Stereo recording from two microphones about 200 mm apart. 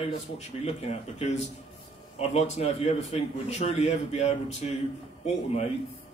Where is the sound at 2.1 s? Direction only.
30° left (ahead or behind).